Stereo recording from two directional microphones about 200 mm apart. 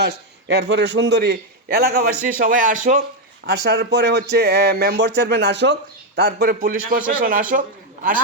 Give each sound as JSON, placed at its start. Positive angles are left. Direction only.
{"t": 0.0, "sound": "a man's voice", "side_deg": -55}
{"t": 3.4, "sound": "a man's voice", "side_deg": -55}